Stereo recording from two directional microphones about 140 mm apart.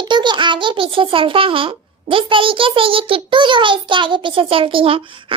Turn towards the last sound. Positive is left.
turn(degrees=-40)  # may be behind; listen again after turning